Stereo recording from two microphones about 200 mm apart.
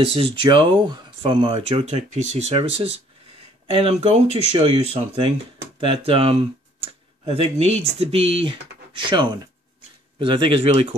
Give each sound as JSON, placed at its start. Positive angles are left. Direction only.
{"t": 0.0, "sound": "speech", "side_deg": -25}